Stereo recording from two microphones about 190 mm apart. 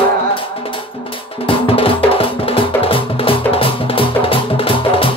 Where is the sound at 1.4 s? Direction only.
30° left (ahead or behind).